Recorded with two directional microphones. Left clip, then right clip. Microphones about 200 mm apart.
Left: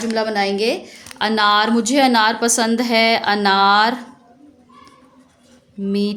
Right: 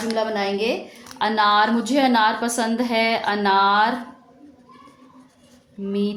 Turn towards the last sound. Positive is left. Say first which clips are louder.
# left 3 dB
turn(degrees=45)  # may be behind; listen again after turning